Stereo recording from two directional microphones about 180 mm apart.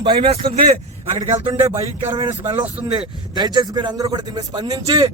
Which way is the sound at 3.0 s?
25° right (ahead or behind).